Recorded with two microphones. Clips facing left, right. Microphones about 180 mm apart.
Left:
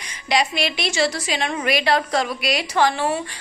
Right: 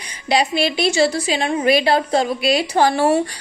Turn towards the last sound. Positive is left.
turn(degrees=-45)  # may be behind; listen again after turning